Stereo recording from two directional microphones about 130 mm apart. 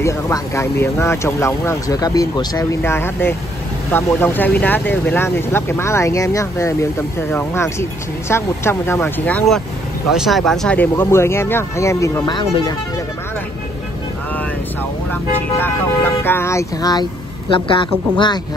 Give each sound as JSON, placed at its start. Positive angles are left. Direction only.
{"t": 0.0, "sound": "speech", "side_deg": 20}
{"t": 2.8, "sound": "speech", "side_deg": 15}
{"t": 10.1, "sound": "speech", "side_deg": 0}
{"t": 10.8, "sound": "speech", "side_deg": 20}
{"t": 12.3, "sound": "a woman's voice", "side_deg": 35}
{"t": 15.6, "sound": "speech", "side_deg": 15}
{"t": 17.5, "sound": "a woman's voice", "side_deg": 40}